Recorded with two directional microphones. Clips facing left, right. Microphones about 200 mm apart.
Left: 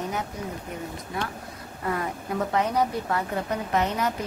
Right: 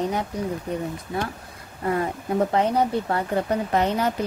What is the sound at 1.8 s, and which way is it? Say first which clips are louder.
Speech: right 5 dB; 30° right (ahead or behind).